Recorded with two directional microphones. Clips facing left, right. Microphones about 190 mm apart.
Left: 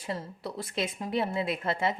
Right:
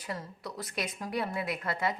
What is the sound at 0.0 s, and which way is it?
A woman's voice, 30° left (ahead or behind).